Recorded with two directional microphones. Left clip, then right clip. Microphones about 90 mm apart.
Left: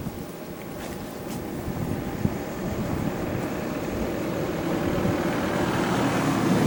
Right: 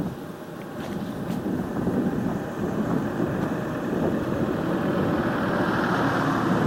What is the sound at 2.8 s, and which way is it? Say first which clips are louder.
Vehicle: right 3 dB; 10° left (ahead or behind).